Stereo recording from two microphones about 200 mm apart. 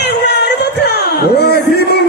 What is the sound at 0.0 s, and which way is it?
Music, 55° left (ahead or behind).